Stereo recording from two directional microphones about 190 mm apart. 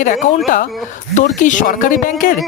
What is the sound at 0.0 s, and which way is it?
Speech, 45° left (ahead or behind).